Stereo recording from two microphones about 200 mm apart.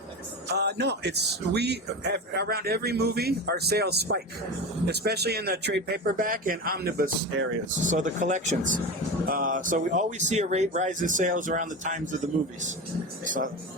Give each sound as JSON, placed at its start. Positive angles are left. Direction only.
{"t": 0.4, "sound": "speech", "side_deg": -55}